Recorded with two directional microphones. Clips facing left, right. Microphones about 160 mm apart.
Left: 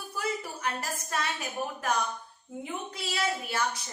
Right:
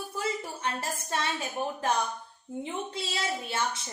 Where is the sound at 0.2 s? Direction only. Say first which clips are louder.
Even; 25° right (ahead or behind).